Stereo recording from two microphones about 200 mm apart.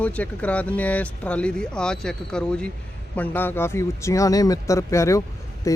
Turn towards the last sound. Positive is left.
turn(degrees=15)  # may be behind; listen again after turning